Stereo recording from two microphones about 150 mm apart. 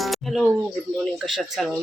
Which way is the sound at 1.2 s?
Centre (ahead or behind).